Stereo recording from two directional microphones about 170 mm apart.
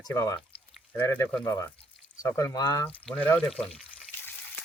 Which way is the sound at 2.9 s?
10° left (ahead or behind).